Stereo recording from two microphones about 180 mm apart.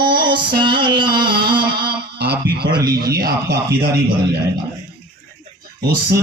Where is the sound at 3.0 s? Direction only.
60° right (ahead or behind).